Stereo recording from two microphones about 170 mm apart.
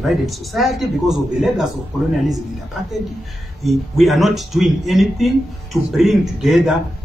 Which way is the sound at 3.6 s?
Centre (ahead or behind).